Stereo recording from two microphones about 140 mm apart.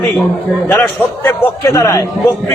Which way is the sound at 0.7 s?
15° left (ahead or behind).